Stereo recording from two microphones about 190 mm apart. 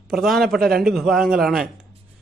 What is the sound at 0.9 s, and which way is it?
Speech, centre (ahead or behind).